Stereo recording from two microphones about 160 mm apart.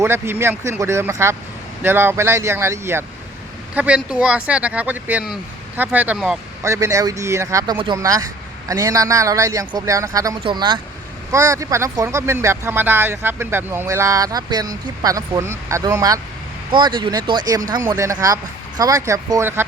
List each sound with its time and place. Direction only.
0.0 s speech: 15° right (ahead or behind)
6.6 s speech: 20° right (ahead or behind)